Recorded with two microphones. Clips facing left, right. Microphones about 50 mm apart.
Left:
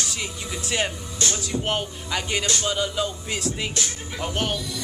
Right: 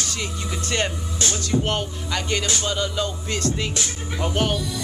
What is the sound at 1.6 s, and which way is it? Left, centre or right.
Music, centre.